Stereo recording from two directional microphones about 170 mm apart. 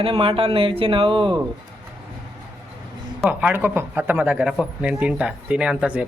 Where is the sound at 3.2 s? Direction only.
10° right (ahead or behind).